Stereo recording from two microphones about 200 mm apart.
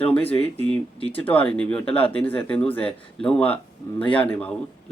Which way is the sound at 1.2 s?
5° left (ahead or behind).